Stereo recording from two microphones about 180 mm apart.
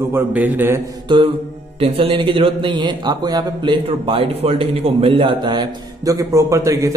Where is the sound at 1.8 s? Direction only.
30° right (ahead or behind).